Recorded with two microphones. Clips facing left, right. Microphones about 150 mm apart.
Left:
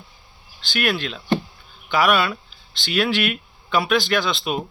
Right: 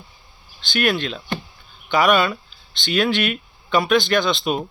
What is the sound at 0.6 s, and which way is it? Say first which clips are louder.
Speech: right 3 dB; centre (ahead or behind).